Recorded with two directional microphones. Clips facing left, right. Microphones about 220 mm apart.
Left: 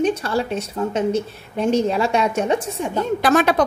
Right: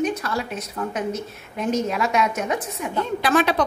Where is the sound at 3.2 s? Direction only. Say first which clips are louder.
Left 3 dB; 45° left (ahead or behind).